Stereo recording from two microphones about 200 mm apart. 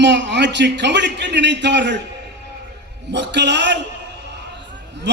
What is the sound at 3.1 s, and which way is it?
Speech, 60° right (ahead or behind).